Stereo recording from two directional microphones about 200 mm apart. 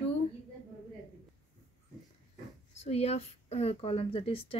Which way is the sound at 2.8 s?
30° left (ahead or behind).